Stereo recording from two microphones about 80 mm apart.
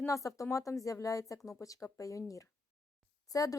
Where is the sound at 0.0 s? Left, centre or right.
Left.